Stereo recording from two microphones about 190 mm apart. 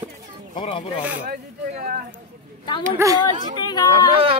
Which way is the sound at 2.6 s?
25° left (ahead or behind).